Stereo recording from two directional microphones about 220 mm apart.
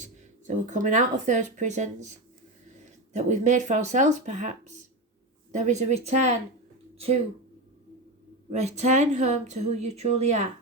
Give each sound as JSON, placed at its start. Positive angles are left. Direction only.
{"t": 0.0, "sound": "speech", "side_deg": -35}
{"t": 3.1, "sound": "speech", "side_deg": -30}
{"t": 8.4, "sound": "speech", "side_deg": -30}